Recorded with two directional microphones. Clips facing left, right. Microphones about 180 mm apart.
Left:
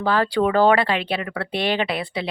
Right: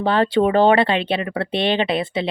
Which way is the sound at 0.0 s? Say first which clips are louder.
Right 3 dB; 25° right (ahead or behind).